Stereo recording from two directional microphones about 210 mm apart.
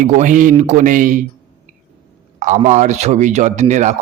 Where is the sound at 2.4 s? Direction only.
35° right (ahead or behind).